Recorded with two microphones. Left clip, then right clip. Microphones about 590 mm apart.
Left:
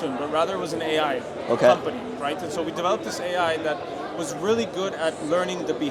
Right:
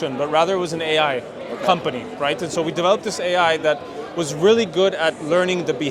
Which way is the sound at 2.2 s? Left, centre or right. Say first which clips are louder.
Right 6 dB; right.